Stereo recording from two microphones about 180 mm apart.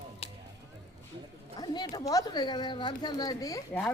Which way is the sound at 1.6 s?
20° left (ahead or behind).